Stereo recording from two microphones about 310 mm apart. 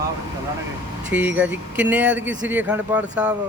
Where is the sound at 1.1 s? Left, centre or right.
Centre.